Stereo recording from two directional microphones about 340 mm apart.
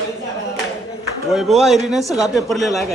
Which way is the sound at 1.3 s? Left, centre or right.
Centre.